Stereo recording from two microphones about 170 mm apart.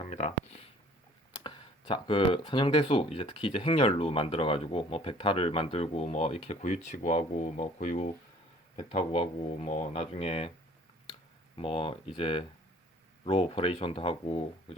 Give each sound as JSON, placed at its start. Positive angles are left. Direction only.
{"t": 0.0, "sound": "speech", "side_deg": 40}
{"t": 1.3, "sound": "speech", "side_deg": 30}
{"t": 11.5, "sound": "speech", "side_deg": 30}